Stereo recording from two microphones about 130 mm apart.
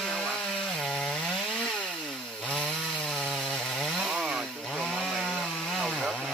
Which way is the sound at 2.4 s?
5° left (ahead or behind).